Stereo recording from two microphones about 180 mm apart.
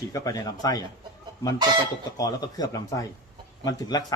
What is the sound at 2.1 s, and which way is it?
A man's voice, 20° left (ahead or behind).